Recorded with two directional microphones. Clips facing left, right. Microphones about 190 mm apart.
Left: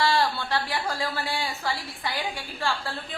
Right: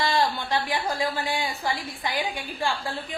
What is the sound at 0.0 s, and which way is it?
A woman's voice, 15° right (ahead or behind).